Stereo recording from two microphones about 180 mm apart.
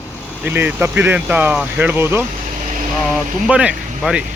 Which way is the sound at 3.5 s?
5° right (ahead or behind).